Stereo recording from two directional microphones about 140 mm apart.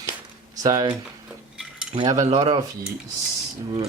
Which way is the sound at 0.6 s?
30° right (ahead or behind).